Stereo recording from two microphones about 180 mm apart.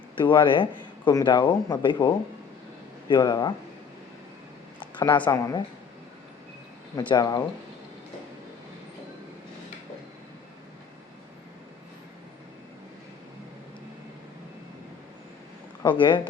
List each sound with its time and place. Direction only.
0.2 s speech: 25° left (ahead or behind)
4.8 s a sound: 25° left (ahead or behind)
5.2 s a woman's voice: 15° left (ahead or behind)
7.1 s speech: 20° left (ahead or behind)
15.8 s speech: 25° left (ahead or behind)